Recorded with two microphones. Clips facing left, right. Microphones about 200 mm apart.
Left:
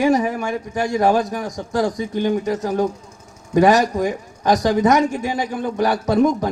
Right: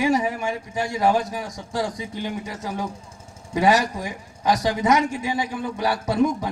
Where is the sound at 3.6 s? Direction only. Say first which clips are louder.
Left 5 dB; 45° left (ahead or behind).